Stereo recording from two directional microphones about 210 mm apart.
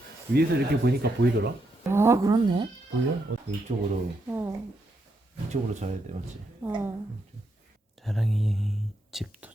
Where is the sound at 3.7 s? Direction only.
35° right (ahead or behind).